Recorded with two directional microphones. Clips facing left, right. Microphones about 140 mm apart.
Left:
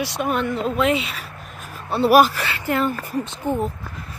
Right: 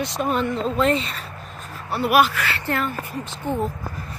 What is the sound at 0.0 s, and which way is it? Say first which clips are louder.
Speech: even; 5° left (ahead or behind).